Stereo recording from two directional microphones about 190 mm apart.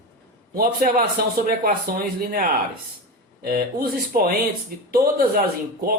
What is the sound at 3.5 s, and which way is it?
Speech, 55° right (ahead or behind).